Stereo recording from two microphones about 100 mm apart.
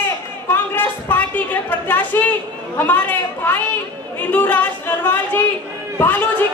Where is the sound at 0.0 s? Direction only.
20° left (ahead or behind).